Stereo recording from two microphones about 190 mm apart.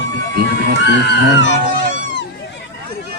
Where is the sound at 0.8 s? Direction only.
65° left (ahead or behind).